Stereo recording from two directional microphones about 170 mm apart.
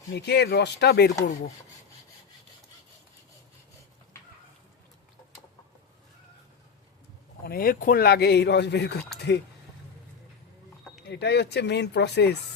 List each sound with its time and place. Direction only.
0.1 s a man's voice: 75° left (ahead or behind)
7.4 s a man's voice: 60° left (ahead or behind); by 9.4 s 80° left
11.1 s speech: 80° left